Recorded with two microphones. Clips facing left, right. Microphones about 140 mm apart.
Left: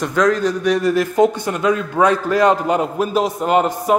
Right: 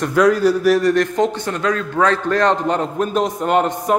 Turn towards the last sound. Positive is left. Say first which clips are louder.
# left 1 dB
turn(degrees=5)  # may be behind; listen again after turning